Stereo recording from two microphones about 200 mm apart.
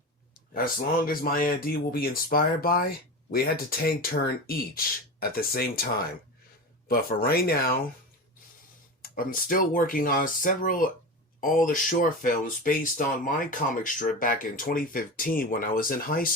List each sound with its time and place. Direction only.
0.5 s speech: 45° left (ahead or behind)
9.0 s speech: 45° left (ahead or behind)